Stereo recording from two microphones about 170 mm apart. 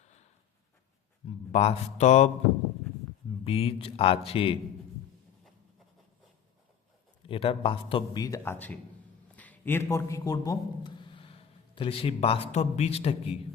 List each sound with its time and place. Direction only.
1.5 s speech: 40° left (ahead or behind)
3.4 s speech: 35° left (ahead or behind)
7.3 s a man's voice: 30° left (ahead or behind)